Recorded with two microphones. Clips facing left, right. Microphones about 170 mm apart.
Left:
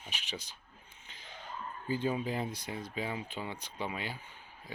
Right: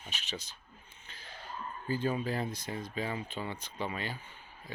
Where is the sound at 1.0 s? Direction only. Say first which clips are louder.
Right 1 dB; 15° left (ahead or behind).